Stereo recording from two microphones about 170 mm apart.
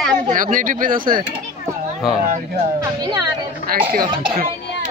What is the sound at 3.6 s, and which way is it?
Speech, 60° right (ahead or behind).